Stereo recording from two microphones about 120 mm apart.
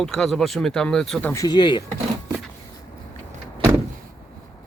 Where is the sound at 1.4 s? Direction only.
40° left (ahead or behind).